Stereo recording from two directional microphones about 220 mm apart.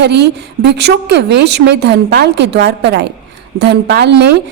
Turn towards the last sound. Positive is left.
turn(degrees=-50)  # may be behind; listen again after turning